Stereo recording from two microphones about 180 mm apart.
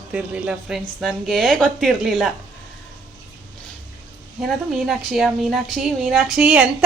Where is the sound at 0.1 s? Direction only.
5° right (ahead or behind).